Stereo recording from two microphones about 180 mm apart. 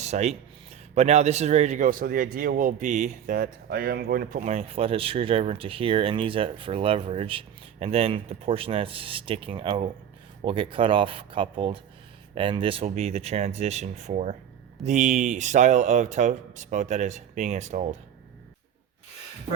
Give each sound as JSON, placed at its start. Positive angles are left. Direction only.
{"t": 0.0, "sound": "a man's voice", "side_deg": -40}
{"t": 4.5, "sound": "speech", "side_deg": -30}